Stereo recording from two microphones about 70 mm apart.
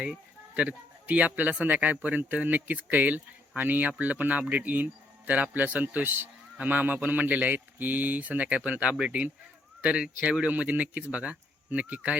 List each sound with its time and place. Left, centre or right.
0.5 s speech: centre